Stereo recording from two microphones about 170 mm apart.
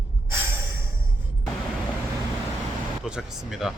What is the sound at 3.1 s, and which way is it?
Speech, 5° right (ahead or behind).